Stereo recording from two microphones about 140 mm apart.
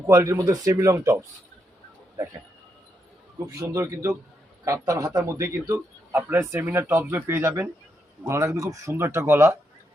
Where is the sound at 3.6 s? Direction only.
20° right (ahead or behind).